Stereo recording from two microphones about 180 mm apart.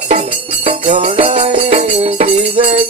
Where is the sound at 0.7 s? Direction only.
30° right (ahead or behind).